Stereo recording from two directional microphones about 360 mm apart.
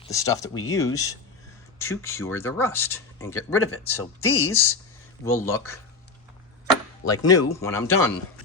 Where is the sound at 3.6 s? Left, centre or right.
Left.